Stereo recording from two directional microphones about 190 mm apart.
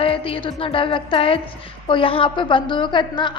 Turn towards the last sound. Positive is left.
turn(degrees=25)  # may be behind; listen again after turning